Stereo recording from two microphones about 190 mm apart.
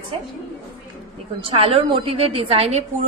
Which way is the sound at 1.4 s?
30° right (ahead or behind).